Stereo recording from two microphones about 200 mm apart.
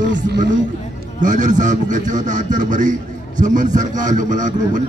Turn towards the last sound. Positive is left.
turn(degrees=-40)  # may be behind; listen again after turning